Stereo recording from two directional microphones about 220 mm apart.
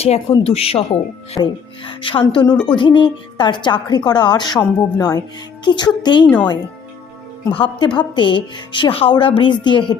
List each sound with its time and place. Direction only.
0.0 s a woman's voice: 30° left (ahead or behind)
6.2 s speech: 5° left (ahead or behind)
7.5 s a woman's voice: 20° left (ahead or behind)